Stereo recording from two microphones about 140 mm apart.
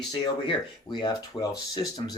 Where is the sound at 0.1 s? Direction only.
35° left (ahead or behind).